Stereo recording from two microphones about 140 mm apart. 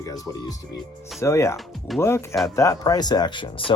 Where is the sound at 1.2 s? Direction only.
20° left (ahead or behind).